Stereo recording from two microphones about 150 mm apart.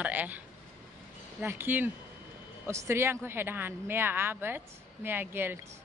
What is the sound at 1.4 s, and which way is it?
A woman's voice, 15° right (ahead or behind).